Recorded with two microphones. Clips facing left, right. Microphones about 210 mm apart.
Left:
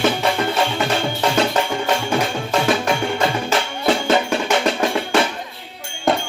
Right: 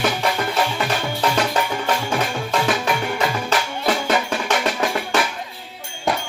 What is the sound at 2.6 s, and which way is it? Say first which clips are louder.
Music: left 3 dB; 25° left (ahead or behind).